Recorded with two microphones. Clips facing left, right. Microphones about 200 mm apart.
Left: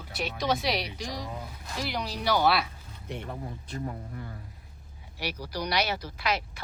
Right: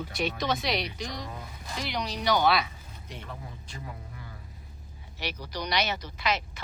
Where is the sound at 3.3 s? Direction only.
45° left (ahead or behind).